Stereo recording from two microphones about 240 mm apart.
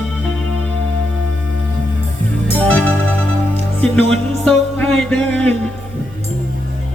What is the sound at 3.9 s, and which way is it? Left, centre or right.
Music, centre.